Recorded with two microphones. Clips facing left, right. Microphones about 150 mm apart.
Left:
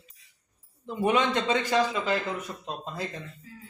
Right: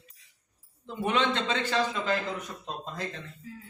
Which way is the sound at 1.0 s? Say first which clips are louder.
Left 3 dB; 10° left (ahead or behind).